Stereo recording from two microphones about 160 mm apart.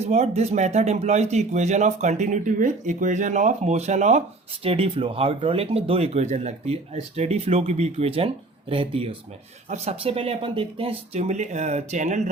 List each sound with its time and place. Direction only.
0.0 s speech: 45° right (ahead or behind)